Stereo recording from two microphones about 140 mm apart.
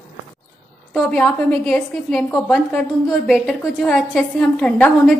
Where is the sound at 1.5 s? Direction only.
5° left (ahead or behind).